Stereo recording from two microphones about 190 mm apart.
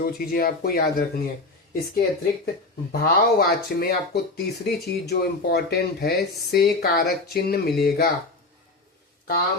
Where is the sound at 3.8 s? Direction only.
55° left (ahead or behind).